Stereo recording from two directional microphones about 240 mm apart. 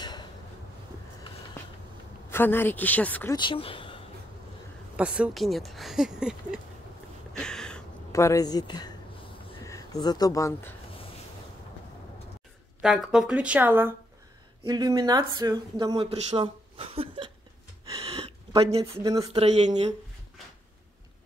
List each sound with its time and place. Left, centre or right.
0.0 s a sound: centre
2.2 s speech: centre
3.3 s speech: left
4.9 s speech: centre
7.3 s a sound: centre
9.7 s speech: centre
12.8 s speech: centre; by 17.3 s right
18.5 s speech: right
18.8 s speech: centre
19.3 s speech: right